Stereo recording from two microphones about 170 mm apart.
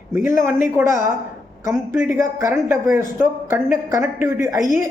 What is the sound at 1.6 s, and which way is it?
A man's voice, 15° right (ahead or behind).